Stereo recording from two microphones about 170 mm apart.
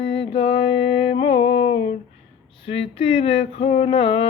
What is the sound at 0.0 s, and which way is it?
Mantra, 35° left (ahead or behind).